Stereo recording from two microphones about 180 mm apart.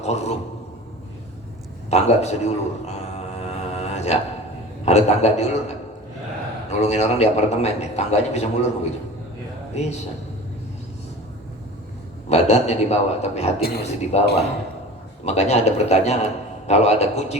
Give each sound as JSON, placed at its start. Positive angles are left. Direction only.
{"t": 0.0, "sound": "a man's voice", "side_deg": 35}
{"t": 1.9, "sound": "music", "side_deg": 35}
{"t": 4.9, "sound": "a man's voice", "side_deg": 40}
{"t": 12.3, "sound": "a man's voice", "side_deg": 40}
{"t": 13.6, "sound": "a man's voice", "side_deg": 60}
{"t": 14.1, "sound": "a man's voice", "side_deg": 35}